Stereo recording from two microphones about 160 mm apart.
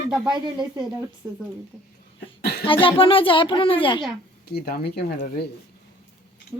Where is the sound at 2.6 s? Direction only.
30° left (ahead or behind).